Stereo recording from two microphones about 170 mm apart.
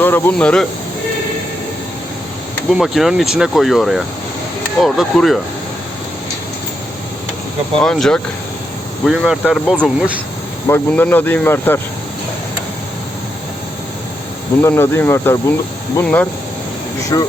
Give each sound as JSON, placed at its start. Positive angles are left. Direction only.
{"t": 0.0, "sound": "speech", "side_deg": 10}
{"t": 2.7, "sound": "speech", "side_deg": 0}
{"t": 7.8, "sound": "speech", "side_deg": 5}
{"t": 10.7, "sound": "speech", "side_deg": 10}
{"t": 14.6, "sound": "speech", "side_deg": 15}
{"t": 17.1, "sound": "speech", "side_deg": 25}